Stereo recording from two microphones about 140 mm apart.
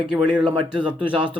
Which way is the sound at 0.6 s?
35° right (ahead or behind).